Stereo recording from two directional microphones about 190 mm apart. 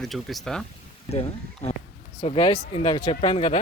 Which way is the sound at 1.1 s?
35° left (ahead or behind).